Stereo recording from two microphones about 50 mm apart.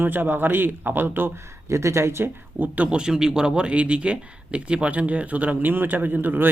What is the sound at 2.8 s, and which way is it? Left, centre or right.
Speech, centre.